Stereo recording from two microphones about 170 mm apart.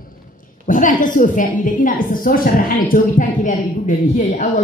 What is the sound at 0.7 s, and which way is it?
A woman's voice, 50° left (ahead or behind).